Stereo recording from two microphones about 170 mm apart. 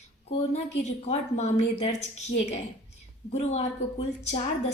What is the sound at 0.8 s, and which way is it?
A woman's voice, 40° left (ahead or behind).